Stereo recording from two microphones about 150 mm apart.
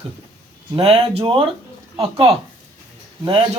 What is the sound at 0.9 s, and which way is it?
Speech, 40° right (ahead or behind).